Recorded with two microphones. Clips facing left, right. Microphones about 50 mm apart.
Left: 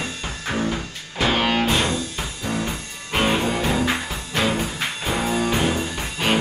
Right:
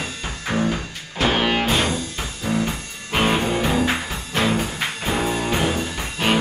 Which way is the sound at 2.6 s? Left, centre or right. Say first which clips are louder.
Right 1 dB; centre.